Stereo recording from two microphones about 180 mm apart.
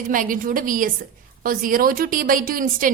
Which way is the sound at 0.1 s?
50° right (ahead or behind).